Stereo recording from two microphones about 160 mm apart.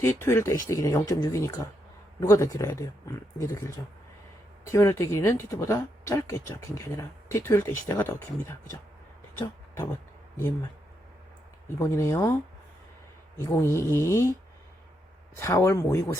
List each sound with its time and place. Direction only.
0.0 s speech: 15° left (ahead or behind)
11.8 s speech: 15° left (ahead or behind)
13.4 s speech: 15° left (ahead or behind)
15.4 s speech: 15° left (ahead or behind)